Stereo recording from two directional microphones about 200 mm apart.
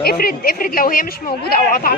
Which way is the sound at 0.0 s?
50° left (ahead or behind).